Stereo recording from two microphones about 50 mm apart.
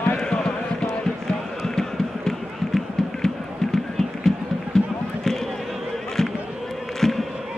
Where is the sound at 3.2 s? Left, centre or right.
Centre.